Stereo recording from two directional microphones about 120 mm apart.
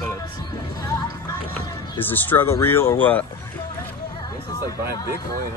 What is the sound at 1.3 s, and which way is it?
Music, 30° left (ahead or behind).